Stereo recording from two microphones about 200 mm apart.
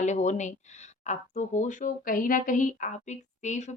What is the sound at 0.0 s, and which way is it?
A woman's voice, 35° left (ahead or behind).